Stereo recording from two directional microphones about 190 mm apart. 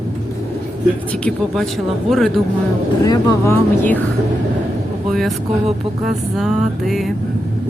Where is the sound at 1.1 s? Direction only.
5° left (ahead or behind).